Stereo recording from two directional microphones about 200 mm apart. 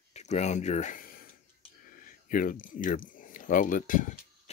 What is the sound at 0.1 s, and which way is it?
Speech, 35° left (ahead or behind).